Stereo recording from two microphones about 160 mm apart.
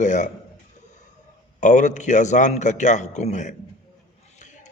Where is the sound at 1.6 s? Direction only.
50° left (ahead or behind).